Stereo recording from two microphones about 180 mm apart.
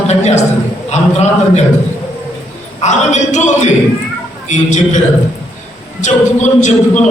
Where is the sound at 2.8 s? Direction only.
40° left (ahead or behind).